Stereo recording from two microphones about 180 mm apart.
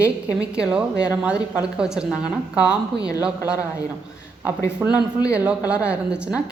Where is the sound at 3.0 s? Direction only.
20° left (ahead or behind).